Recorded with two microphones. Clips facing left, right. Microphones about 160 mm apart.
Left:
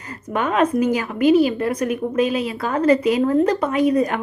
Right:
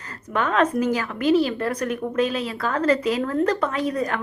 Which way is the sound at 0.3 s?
15° left (ahead or behind).